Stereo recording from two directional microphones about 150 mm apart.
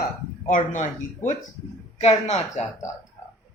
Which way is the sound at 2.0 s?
50° left (ahead or behind).